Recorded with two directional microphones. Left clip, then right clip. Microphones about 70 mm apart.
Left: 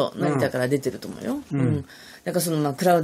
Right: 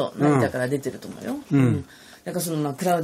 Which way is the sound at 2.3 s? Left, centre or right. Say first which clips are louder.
Left 3 dB; left.